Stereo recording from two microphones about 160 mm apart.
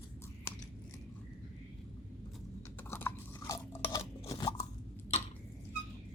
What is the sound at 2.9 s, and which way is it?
Chewing, 15° left (ahead or behind).